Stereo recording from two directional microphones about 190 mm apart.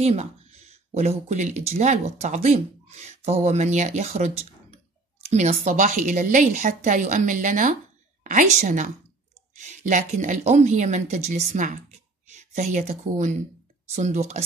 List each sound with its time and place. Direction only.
0.0 s a woman's voice: 35° right (ahead or behind)